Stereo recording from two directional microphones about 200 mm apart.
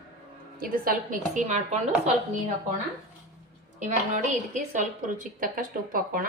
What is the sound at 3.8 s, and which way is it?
A woman's voice, 35° right (ahead or behind).